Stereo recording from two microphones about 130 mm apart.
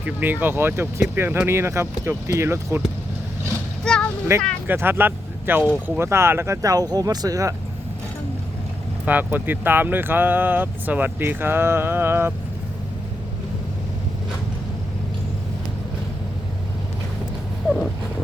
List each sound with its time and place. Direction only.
0.0 s speech: 15° right (ahead or behind)
3.8 s a sound: 5° left (ahead or behind)
4.3 s speech: 25° right (ahead or behind)
9.0 s speech: 15° right (ahead or behind)